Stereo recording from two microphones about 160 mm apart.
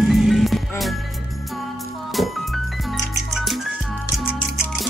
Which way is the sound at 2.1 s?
Centre (ahead or behind).